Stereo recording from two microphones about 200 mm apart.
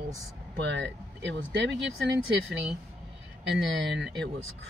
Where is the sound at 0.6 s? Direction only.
65° right (ahead or behind).